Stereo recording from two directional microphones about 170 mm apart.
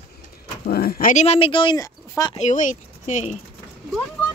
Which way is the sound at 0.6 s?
65° left (ahead or behind).